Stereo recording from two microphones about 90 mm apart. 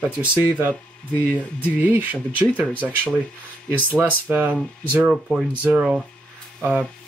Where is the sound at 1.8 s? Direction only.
20° right (ahead or behind).